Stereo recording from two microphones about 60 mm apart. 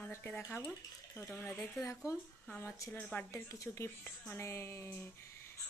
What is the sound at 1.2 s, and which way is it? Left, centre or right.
Speech, left.